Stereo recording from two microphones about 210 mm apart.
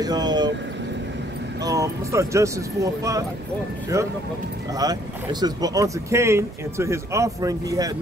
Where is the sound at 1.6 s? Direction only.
15° right (ahead or behind).